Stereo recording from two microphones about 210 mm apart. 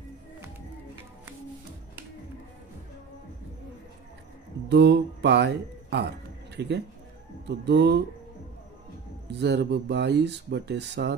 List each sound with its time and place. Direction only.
4.6 s speech: 55° right (ahead or behind)
9.3 s speech: 55° right (ahead or behind)